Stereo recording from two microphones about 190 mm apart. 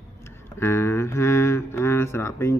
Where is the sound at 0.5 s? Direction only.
15° left (ahead or behind).